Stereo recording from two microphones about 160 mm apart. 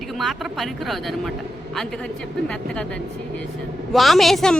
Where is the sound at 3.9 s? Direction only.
Centre (ahead or behind).